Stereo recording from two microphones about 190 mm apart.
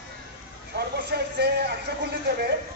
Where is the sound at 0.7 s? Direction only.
60° right (ahead or behind).